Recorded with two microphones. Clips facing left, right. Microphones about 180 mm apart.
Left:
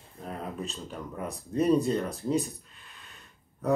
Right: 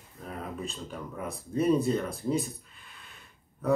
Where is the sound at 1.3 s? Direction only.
35° left (ahead or behind).